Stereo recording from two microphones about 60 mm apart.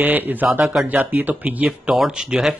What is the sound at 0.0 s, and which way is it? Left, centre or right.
Speech, right.